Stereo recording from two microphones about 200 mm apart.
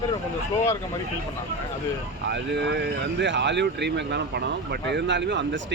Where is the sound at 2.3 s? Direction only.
60° right (ahead or behind).